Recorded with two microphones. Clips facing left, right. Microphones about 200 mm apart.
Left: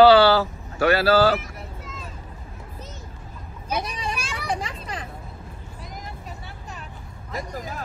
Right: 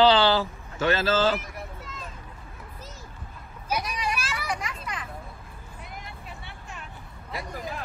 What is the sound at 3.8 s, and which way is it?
Speech, 30° left (ahead or behind).